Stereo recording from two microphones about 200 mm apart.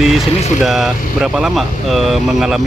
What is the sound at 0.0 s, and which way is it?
Speech, centre (ahead or behind).